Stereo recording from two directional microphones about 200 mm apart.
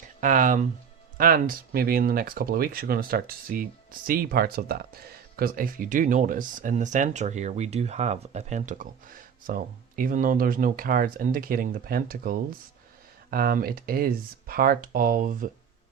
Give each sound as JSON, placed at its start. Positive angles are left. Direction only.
{"t": 0.2, "sound": "speech", "side_deg": -40}